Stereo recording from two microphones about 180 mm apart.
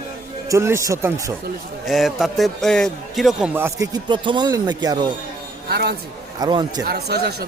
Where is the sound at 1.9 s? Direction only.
Centre (ahead or behind).